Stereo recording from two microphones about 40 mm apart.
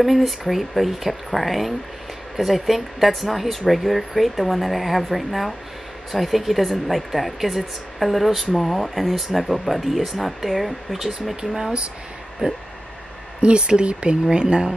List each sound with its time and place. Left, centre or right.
0.0 s speech: centre
12.4 s speech: right